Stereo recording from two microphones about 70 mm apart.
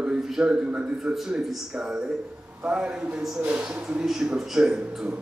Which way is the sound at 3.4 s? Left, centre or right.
Right.